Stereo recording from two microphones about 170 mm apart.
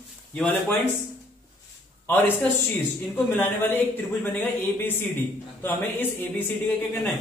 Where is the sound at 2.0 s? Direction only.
10° left (ahead or behind).